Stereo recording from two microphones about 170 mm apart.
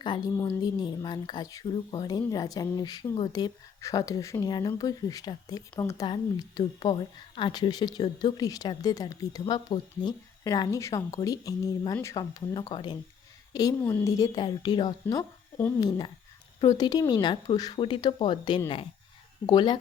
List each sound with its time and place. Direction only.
0.0 s a woman's voice: 25° left (ahead or behind)
15.0 s a woman's voice: 10° left (ahead or behind)